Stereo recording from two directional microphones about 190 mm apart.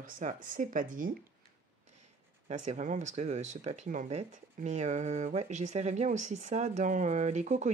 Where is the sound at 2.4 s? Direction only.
40° right (ahead or behind).